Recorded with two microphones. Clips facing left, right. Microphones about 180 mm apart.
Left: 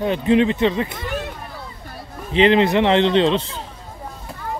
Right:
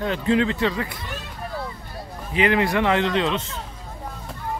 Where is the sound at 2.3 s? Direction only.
25° left (ahead or behind).